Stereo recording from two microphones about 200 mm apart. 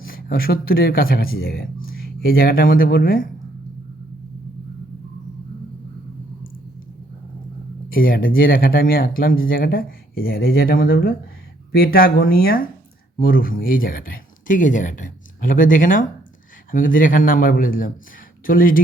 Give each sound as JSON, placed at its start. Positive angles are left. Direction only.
{"t": 0.0, "sound": "speech", "side_deg": 45}
{"t": 7.9, "sound": "speech", "side_deg": 45}